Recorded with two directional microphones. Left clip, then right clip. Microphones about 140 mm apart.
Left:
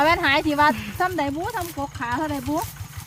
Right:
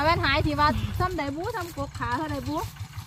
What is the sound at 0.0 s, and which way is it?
Speech, 40° left (ahead or behind).